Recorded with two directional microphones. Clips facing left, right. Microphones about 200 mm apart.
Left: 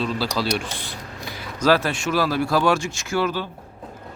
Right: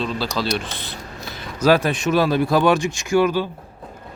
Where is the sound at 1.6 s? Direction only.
15° right (ahead or behind).